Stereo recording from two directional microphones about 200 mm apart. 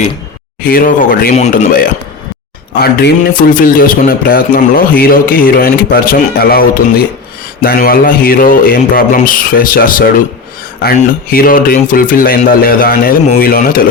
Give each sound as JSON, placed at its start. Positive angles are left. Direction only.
{"t": 0.7, "sound": "speech", "side_deg": 45}
{"t": 11.3, "sound": "speech", "side_deg": 45}